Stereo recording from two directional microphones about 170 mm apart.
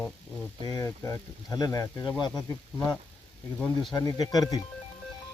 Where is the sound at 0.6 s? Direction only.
20° left (ahead or behind).